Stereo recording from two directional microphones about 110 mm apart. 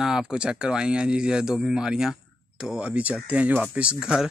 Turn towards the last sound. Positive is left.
turn(degrees=-5)  # may be behind; listen again after turning